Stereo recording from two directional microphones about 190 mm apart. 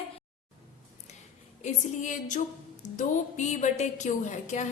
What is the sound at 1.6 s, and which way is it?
Speech, 40° left (ahead or behind).